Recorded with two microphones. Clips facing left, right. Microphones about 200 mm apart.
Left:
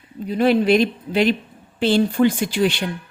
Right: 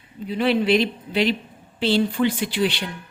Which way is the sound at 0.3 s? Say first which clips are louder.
Left 3 dB; 45° left (ahead or behind).